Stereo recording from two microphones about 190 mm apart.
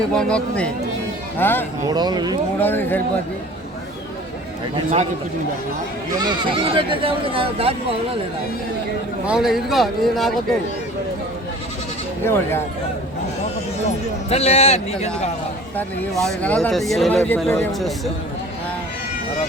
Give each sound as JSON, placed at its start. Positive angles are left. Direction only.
{"t": 0.1, "sound": "speech", "side_deg": 5}
{"t": 1.9, "sound": "speech", "side_deg": -20}
{"t": 2.6, "sound": "speech", "side_deg": 10}
{"t": 6.1, "sound": "speech", "side_deg": -20}
{"t": 9.2, "sound": "speech", "side_deg": -5}
{"t": 12.2, "sound": "speech", "side_deg": 10}
{"t": 13.8, "sound": "a man's voice", "side_deg": 35}
{"t": 16.0, "sound": "speech", "side_deg": 5}